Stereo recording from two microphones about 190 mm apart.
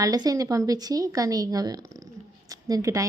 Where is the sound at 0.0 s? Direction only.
20° right (ahead or behind).